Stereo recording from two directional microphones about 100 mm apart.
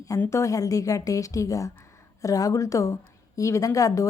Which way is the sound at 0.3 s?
30° left (ahead or behind).